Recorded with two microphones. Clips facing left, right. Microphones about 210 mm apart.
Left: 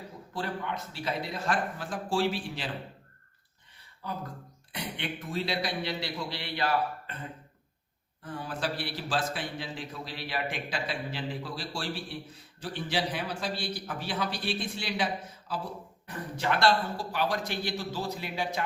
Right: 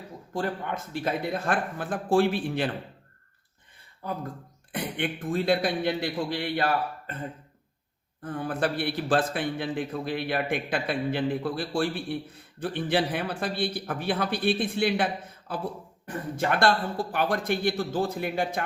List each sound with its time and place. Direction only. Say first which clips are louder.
0.3 s a man's voice: right 4 dB; 50° right (ahead or behind)
4.0 s a man's voice: right 4 dB; 50° right (ahead or behind)
8.2 s a man's voice: right 6 dB; 55° right (ahead or behind)